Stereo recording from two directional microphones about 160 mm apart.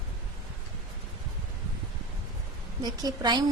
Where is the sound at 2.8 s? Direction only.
25° right (ahead or behind).